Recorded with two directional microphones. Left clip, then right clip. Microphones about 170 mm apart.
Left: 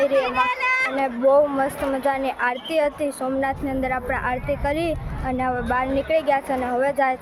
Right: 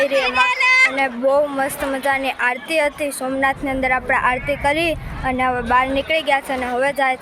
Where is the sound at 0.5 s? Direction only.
60° left (ahead or behind).